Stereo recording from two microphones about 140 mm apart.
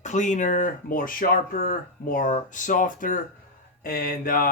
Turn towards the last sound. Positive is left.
turn(degrees=85)